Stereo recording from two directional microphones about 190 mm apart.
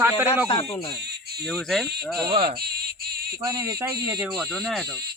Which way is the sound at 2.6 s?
55° right (ahead or behind).